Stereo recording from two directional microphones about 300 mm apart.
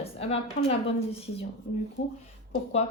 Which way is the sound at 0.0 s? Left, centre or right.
Centre.